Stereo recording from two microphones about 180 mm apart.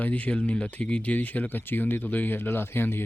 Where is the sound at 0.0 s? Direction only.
10° left (ahead or behind).